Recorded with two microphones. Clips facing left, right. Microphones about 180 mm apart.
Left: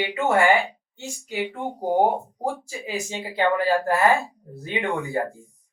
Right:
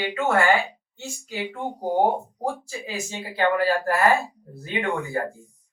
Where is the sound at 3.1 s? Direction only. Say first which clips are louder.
Even; 20° left (ahead or behind).